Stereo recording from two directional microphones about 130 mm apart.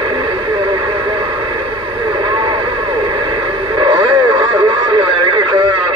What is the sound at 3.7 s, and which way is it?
Radio, 40° right (ahead or behind).